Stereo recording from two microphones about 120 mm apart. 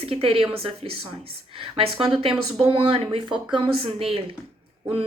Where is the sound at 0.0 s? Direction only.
55° right (ahead or behind).